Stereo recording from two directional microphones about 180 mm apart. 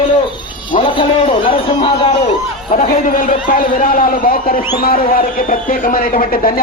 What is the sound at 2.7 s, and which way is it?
Speech, 50° left (ahead or behind).